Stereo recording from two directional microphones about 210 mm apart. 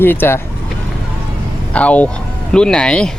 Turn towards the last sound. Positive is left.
turn(degrees=5)  # may be behind; listen again after turning